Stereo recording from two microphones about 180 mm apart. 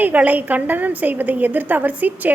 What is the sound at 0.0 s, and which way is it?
A woman's voice, 10° right (ahead or behind).